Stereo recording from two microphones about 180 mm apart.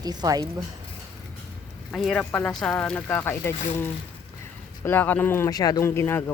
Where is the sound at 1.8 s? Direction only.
Centre (ahead or behind).